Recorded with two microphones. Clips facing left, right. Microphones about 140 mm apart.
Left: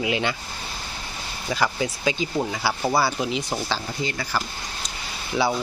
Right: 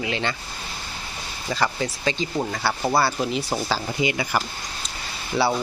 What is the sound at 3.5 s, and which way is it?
Speech, 10° right (ahead or behind).